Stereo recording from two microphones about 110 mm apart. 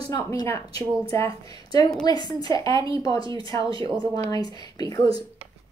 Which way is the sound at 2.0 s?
35° left (ahead or behind).